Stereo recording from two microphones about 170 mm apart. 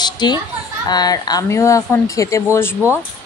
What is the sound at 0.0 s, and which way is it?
A woman's voice, 25° left (ahead or behind).